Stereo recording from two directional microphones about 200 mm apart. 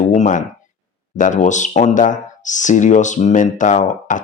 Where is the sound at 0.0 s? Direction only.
35° left (ahead or behind).